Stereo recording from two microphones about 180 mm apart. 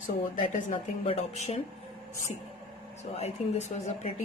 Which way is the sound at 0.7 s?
35° left (ahead or behind).